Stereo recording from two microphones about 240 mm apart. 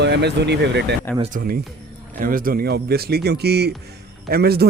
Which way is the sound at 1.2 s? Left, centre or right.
Right.